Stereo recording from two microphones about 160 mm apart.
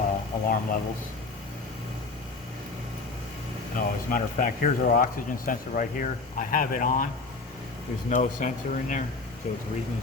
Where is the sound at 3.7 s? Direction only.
60° left (ahead or behind).